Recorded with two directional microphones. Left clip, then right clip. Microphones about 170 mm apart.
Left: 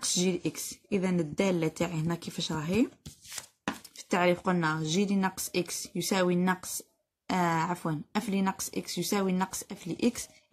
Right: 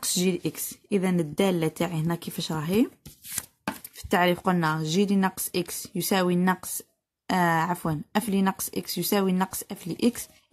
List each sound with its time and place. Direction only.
0.0 s a woman's voice: 40° right (ahead or behind)
4.1 s a woman's voice: 40° right (ahead or behind)